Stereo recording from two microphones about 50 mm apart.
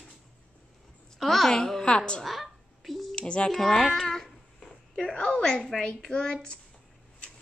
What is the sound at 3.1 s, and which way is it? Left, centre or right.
Speech, left.